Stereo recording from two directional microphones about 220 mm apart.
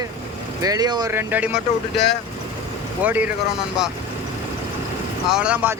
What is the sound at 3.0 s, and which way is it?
Speech, 5° right (ahead or behind).